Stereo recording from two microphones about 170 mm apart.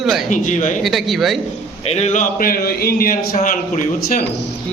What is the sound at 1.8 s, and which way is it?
A man's voice, 40° left (ahead or behind).